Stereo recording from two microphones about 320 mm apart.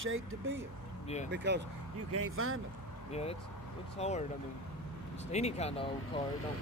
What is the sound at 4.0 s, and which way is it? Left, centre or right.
Speech, left.